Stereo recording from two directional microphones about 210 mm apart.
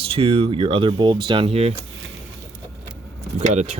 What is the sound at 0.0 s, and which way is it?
Speech, 30° right (ahead or behind).